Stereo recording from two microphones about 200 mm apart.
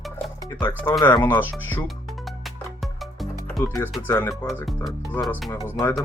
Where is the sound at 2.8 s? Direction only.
Centre (ahead or behind).